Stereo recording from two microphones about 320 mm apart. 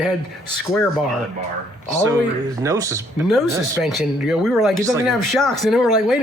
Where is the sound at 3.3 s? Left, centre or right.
Centre.